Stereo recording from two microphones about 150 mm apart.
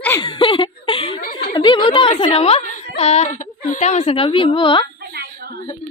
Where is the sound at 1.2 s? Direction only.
70° left (ahead or behind).